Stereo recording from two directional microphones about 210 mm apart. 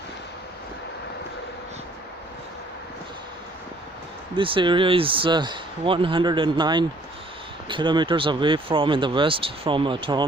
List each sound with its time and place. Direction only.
4.4 s speech: 25° right (ahead or behind)